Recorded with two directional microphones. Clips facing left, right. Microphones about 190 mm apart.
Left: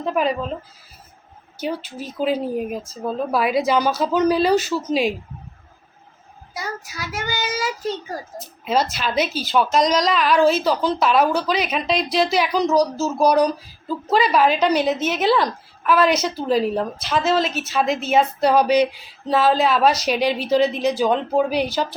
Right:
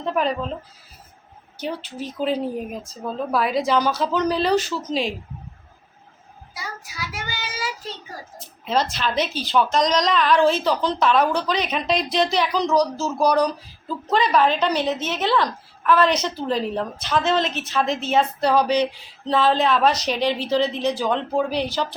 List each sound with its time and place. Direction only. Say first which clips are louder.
0.0 s a woman's voice: left 2 dB; 10° left (ahead or behind)
1.6 s a woman's voice: left 2 dB; 5° left (ahead or behind)
6.5 s child singing: left 6 dB; 45° left (ahead or behind)
8.6 s a woman's voice: left 1 dB; 10° left (ahead or behind)